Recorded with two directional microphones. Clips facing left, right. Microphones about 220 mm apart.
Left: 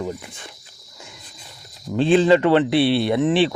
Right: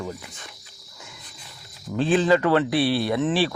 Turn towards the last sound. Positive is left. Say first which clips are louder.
# left 4 dB
turn(degrees=20)  # may be behind; listen again after turning